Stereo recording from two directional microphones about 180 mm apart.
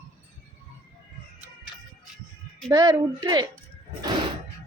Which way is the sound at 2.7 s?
20° right (ahead or behind).